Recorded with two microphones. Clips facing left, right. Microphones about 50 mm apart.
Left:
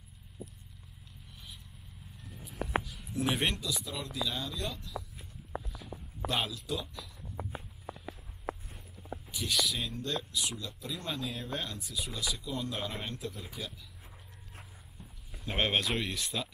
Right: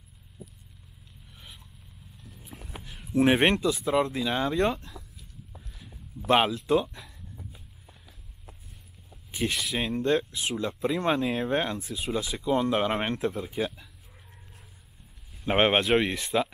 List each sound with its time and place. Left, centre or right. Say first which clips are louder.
2.5 s a sound: left 9 dB; right
3.1 s speech: right 10 dB; right
5.5 s a sound: left 13 dB; left
6.2 s speech: right 11 dB; right
7.3 s walk: left 6 dB; left
9.3 s speech: right 4 dB; right
15.4 s speech: right 8 dB; right